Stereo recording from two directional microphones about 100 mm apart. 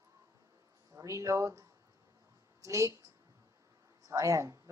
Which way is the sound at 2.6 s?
30° right (ahead or behind).